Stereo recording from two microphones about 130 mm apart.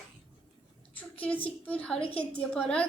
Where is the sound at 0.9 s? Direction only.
10° left (ahead or behind).